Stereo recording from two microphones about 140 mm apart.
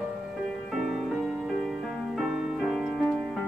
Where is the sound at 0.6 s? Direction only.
Centre (ahead or behind).